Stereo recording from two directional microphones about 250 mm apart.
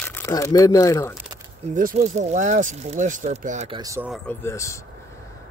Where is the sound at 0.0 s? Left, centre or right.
Centre.